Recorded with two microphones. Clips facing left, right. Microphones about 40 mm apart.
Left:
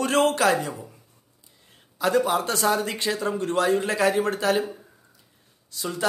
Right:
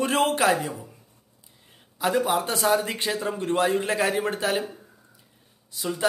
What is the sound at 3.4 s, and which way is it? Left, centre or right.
Speech, right.